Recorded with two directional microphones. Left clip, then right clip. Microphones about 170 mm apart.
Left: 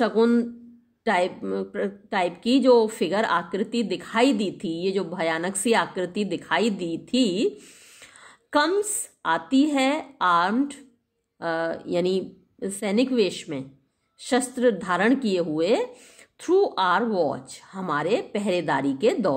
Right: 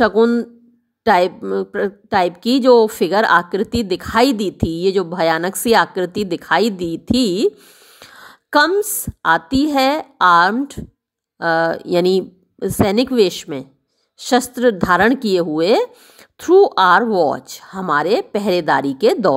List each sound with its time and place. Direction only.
0.0 s a woman's voice: 45° right (ahead or behind)